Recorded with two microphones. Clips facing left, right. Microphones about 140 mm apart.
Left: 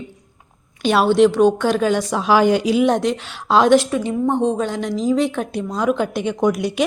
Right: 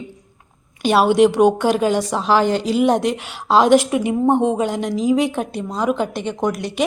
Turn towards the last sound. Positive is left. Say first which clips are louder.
# left 3 dB
turn(degrees=5)  # may be behind; listen again after turning